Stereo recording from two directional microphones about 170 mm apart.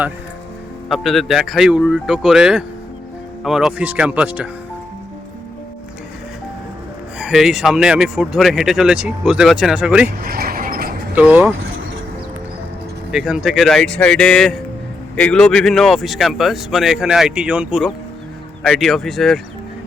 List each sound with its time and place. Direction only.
0.9 s speech: centre (ahead or behind)
7.2 s speech: 5° right (ahead or behind)
10.2 s mechanisms: 60° right (ahead or behind)
11.1 s speech: 10° right (ahead or behind)
13.1 s speech: 5° right (ahead or behind)